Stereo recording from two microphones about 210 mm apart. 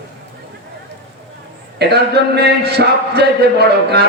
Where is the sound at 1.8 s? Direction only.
50° right (ahead or behind).